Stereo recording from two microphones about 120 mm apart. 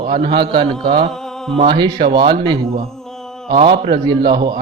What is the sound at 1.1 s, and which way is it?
Mantra, 5° left (ahead or behind).